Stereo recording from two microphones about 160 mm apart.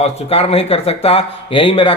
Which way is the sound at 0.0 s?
40° left (ahead or behind).